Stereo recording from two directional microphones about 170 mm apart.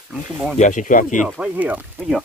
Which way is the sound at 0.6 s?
45° left (ahead or behind).